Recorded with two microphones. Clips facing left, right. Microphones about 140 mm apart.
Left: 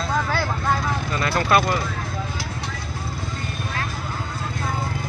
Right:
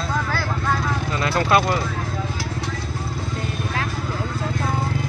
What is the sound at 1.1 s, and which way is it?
Speech, 20° right (ahead or behind).